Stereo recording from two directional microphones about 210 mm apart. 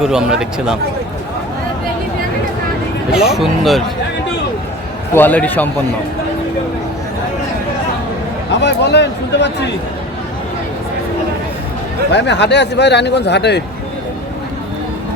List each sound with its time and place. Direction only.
0.0 s speech: 5° right (ahead or behind)
3.1 s speech: 5° right (ahead or behind)
5.1 s a man's voice: 10° left (ahead or behind)
8.6 s speech: 55° left (ahead or behind)
12.1 s speech: 55° left (ahead or behind)